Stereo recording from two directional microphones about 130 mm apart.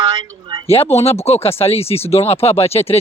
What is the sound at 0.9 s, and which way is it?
Speech, 50° left (ahead or behind).